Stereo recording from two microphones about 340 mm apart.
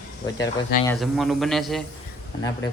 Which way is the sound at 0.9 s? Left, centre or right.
Centre.